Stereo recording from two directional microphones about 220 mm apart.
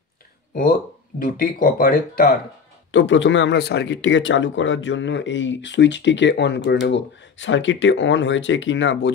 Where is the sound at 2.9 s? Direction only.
60° left (ahead or behind).